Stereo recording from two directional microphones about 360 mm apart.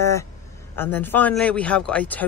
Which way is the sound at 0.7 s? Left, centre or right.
Centre.